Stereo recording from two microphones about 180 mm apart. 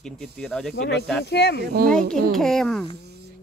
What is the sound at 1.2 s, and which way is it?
Speech, 70° left (ahead or behind).